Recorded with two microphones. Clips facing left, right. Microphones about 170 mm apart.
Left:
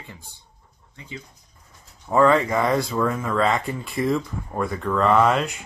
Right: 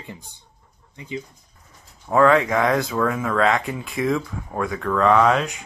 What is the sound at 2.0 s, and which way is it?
Speech, centre (ahead or behind).